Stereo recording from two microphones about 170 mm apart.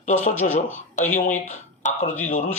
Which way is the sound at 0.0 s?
45° left (ahead or behind).